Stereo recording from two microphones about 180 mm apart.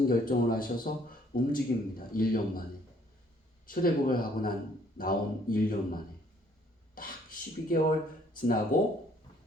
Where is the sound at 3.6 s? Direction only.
50° left (ahead or behind).